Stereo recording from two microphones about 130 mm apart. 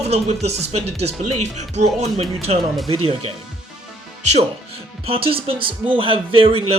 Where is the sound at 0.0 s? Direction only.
55° right (ahead or behind).